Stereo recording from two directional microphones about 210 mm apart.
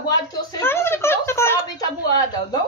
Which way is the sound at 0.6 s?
10° left (ahead or behind).